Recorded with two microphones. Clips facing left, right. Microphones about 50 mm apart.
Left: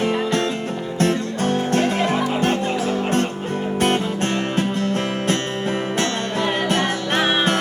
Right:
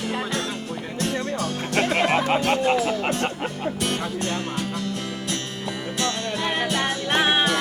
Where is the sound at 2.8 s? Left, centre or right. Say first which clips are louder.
Left 3 dB; left.